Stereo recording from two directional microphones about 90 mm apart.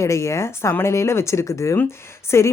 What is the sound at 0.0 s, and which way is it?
Speech, 35° left (ahead or behind).